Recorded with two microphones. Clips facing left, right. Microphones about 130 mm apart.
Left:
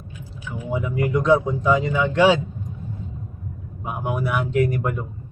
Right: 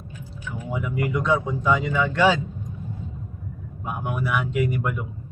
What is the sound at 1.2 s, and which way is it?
Speech, centre (ahead or behind).